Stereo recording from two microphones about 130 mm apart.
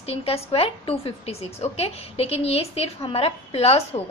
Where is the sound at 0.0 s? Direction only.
50° left (ahead or behind).